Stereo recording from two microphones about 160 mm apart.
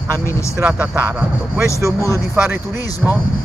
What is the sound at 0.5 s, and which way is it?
Speech, 10° right (ahead or behind).